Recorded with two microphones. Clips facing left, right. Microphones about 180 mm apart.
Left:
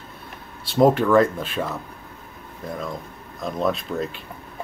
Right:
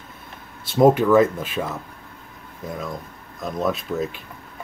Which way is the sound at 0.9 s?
5° right (ahead or behind).